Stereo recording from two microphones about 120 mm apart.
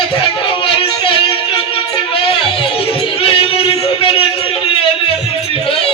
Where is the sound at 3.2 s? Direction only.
50° left (ahead or behind).